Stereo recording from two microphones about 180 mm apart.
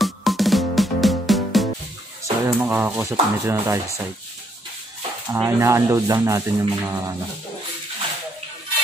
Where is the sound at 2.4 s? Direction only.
10° right (ahead or behind).